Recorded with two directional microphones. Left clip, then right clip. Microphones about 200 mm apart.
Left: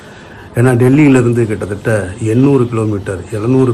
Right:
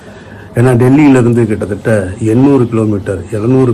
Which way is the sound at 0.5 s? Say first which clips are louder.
Right 2 dB; 10° left (ahead or behind).